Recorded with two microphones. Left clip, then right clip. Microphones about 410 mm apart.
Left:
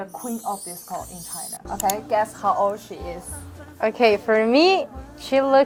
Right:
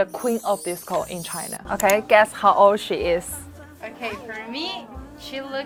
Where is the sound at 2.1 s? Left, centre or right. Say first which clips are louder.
Right 6 dB; right.